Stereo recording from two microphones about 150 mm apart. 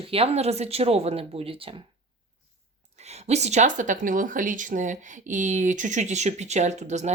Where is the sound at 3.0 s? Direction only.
45° right (ahead or behind).